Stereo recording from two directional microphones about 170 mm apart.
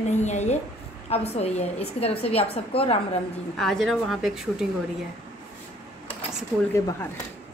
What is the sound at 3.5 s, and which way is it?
A woman's voice, centre (ahead or behind).